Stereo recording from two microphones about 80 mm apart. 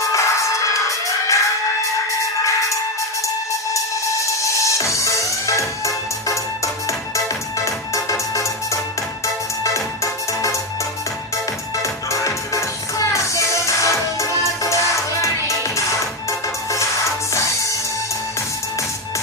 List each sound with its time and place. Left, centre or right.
0.0 s music: left
4.4 s music: left
12.1 s music: left